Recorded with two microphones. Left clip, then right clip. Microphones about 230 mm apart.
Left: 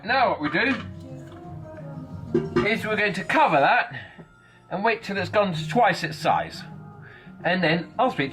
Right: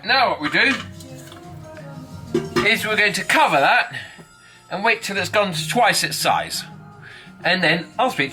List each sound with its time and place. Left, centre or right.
0.0 s speech: centre
2.3 s speech: centre